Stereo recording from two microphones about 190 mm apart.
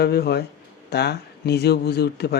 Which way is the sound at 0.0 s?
60° left (ahead or behind).